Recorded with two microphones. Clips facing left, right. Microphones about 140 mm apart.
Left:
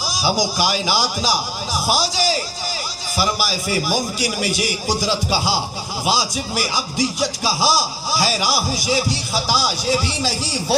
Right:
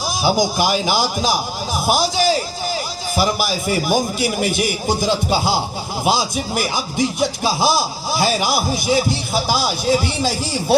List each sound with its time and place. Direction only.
0.1 s speech: 55° right (ahead or behind)
3.8 s speech: 55° right (ahead or behind)